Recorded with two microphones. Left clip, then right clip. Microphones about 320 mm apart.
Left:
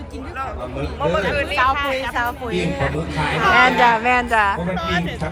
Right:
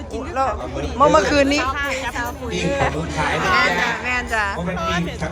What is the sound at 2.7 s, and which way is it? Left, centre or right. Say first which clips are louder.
Speech: right 3 dB; centre.